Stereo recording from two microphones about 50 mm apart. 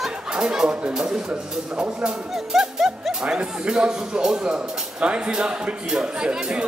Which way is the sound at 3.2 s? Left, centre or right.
Centre.